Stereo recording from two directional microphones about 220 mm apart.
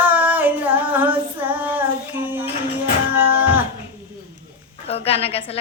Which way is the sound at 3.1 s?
10° right (ahead or behind).